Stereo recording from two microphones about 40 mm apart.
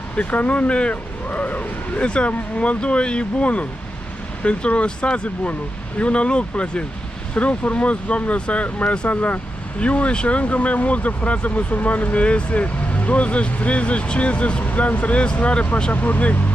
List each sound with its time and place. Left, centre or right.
0.1 s speech: left
1.3 s a sound: left
2.0 s speech: left